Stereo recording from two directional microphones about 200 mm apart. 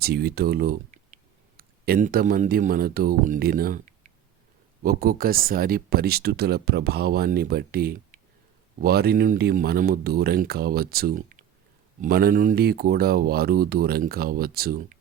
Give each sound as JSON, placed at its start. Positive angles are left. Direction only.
{"t": 0.0, "sound": "speech", "side_deg": -50}